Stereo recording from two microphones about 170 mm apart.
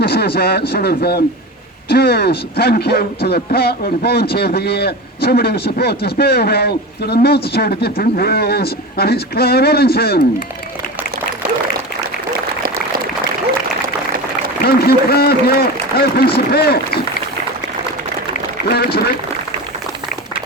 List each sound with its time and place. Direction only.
0.0 s speech: 70° left (ahead or behind)
14.6 s a man's voice: 65° left (ahead or behind)
18.7 s a man's voice: 65° left (ahead or behind)